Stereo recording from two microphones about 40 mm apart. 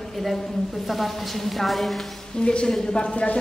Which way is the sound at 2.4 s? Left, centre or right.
Left.